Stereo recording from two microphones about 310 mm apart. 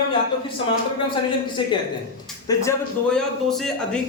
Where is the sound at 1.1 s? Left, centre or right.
Centre.